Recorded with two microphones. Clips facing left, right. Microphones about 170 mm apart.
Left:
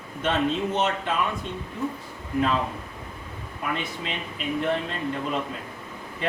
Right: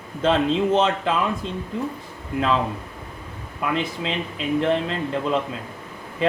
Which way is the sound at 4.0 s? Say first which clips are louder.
Right 5 dB; 90° right.